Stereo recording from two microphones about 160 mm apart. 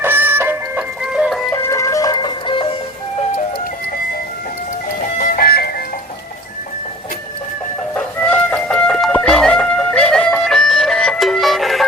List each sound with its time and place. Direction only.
0.0 s music: 15° right (ahead or behind)
1.6 s music: 20° left (ahead or behind)
5.1 s music: 65° left (ahead or behind)
7.9 s music: 10° left (ahead or behind)